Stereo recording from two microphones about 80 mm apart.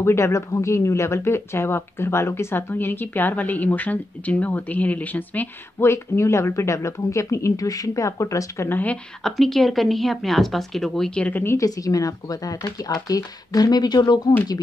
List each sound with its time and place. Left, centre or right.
0.0 s speech: left
5.8 s speech: left
8.6 s speech: left
9.2 s speech: centre
11.1 s speech: centre
11.4 s speech: left